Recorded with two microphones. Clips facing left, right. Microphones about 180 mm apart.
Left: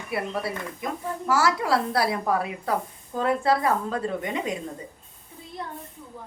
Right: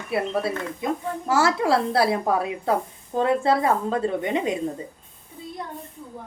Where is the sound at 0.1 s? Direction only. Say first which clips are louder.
Right 4 dB; 25° right (ahead or behind).